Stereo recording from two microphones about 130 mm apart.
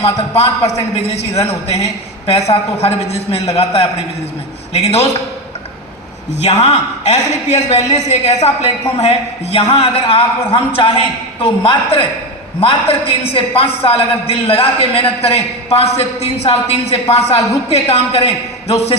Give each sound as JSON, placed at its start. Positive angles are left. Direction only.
{"t": 0.0, "sound": "a man's voice", "side_deg": 50}
{"t": 2.2, "sound": "a man's voice", "side_deg": 50}
{"t": 6.4, "sound": "a man's voice", "side_deg": 55}